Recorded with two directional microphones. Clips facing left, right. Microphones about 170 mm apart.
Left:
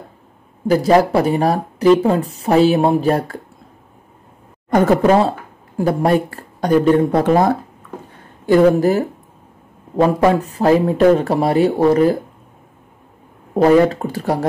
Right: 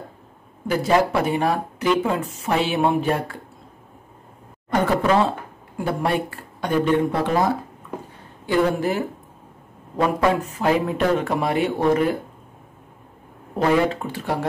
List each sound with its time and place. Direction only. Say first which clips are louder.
0.7 s speech: left 6 dB; 40° left (ahead or behind)
4.6 s speech: left 7 dB; 45° left (ahead or behind)
13.6 s speech: left 7 dB; 40° left (ahead or behind)